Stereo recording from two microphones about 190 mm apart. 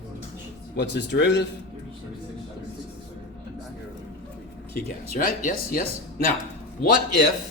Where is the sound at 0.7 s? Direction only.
65° left (ahead or behind).